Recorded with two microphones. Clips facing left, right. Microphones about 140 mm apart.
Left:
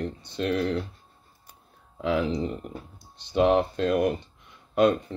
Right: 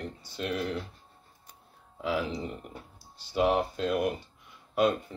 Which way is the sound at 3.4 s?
5° right (ahead or behind).